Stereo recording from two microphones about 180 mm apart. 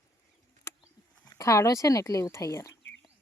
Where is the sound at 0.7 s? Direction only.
15° left (ahead or behind).